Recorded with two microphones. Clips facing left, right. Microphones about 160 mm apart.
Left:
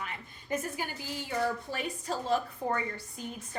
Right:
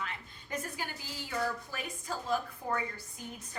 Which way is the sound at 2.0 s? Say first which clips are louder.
Left 3 dB; 30° left (ahead or behind).